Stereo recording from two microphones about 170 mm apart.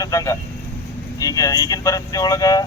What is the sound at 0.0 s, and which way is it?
Speech, 20° left (ahead or behind).